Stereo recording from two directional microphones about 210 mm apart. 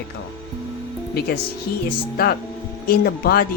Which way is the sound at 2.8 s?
45° left (ahead or behind).